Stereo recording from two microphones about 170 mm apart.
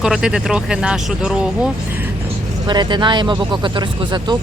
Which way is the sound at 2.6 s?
25° right (ahead or behind).